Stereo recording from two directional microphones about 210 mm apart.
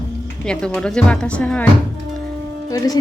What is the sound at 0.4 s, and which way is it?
A woman's voice, 5° left (ahead or behind).